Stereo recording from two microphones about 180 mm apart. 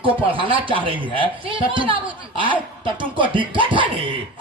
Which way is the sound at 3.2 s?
30° right (ahead or behind).